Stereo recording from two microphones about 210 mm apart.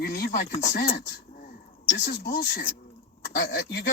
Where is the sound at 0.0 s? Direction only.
45° left (ahead or behind).